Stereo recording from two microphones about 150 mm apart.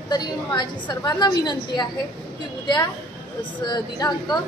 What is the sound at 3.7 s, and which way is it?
Speech, 30° left (ahead or behind).